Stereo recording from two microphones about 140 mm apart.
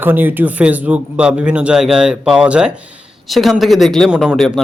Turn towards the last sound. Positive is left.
turn(degrees=0)  # may be behind; listen again after turning